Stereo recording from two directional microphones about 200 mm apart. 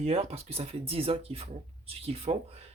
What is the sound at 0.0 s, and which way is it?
Speech, 30° right (ahead or behind).